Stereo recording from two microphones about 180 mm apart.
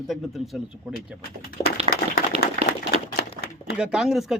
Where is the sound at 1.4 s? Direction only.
55° left (ahead or behind).